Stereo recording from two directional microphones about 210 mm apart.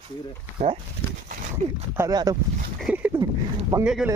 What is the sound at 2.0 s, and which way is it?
Speech, 15° right (ahead or behind).